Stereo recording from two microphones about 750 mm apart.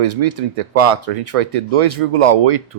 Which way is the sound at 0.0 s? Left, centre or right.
Right.